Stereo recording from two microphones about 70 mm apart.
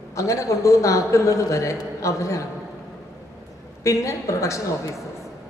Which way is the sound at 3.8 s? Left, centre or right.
Left.